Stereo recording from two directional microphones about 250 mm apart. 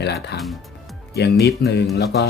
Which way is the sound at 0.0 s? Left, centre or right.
Left.